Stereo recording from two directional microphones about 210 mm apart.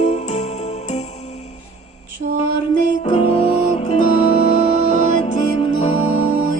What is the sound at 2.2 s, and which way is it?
Mantra, 70° right (ahead or behind).